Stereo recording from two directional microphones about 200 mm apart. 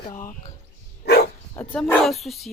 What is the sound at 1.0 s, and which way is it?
Dog, 55° left (ahead or behind).